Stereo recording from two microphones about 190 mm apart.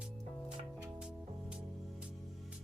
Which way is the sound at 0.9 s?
5° right (ahead or behind).